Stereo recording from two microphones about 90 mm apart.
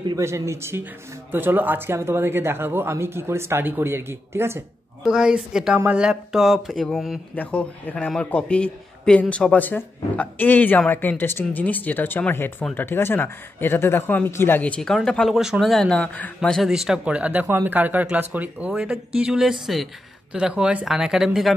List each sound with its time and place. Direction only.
0.2 s speech: 30° right (ahead or behind)
5.0 s speech: 5° right (ahead or behind)
7.3 s a man's voice: 15° left (ahead or behind)
14.6 s speech: 10° left (ahead or behind)